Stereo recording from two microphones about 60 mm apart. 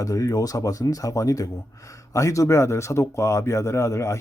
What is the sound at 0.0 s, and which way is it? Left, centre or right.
A man's voice, left.